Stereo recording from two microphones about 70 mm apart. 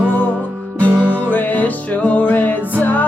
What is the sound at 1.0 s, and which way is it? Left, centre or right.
Music, right.